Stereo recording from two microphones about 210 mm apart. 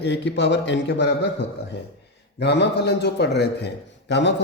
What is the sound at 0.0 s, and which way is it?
A man's voice, 55° left (ahead or behind).